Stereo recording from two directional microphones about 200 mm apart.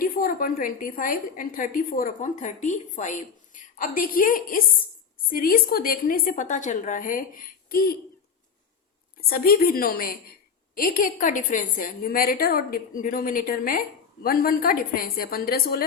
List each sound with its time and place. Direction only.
0.0 s a woman's voice: 45° left (ahead or behind)
9.3 s a woman's voice: 50° left (ahead or behind)